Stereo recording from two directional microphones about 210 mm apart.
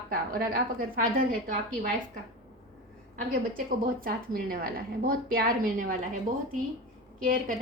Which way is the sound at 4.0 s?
45° right (ahead or behind).